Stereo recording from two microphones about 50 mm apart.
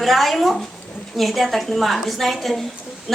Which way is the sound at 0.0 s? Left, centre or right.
Centre.